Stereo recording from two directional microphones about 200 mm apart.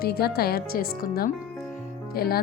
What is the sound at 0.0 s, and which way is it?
Music, 50° left (ahead or behind).